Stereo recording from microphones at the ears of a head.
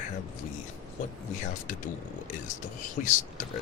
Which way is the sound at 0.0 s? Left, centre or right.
Left.